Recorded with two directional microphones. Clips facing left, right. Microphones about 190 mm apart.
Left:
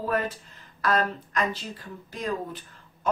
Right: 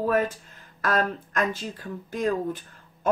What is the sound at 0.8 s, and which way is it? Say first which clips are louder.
Speech: even; 50° right (ahead or behind).